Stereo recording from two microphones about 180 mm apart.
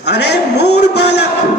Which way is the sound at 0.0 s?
65° left (ahead or behind).